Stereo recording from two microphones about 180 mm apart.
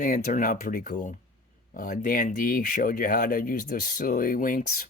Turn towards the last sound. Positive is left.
turn(degrees=50)  # may be behind; listen again after turning